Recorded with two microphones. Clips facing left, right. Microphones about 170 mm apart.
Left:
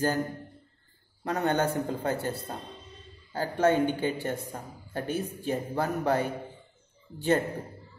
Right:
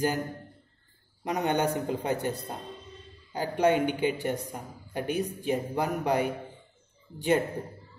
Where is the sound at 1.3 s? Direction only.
15° right (ahead or behind).